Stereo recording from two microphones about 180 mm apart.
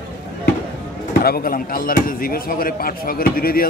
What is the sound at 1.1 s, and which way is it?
Speech, 55° left (ahead or behind).